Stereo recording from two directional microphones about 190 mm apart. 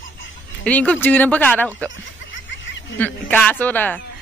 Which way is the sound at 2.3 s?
75° left (ahead or behind).